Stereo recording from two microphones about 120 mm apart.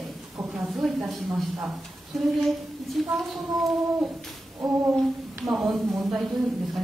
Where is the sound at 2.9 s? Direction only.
Centre (ahead or behind).